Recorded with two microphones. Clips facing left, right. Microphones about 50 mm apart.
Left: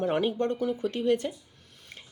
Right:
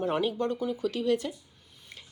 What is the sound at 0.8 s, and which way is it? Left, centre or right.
Speech, left.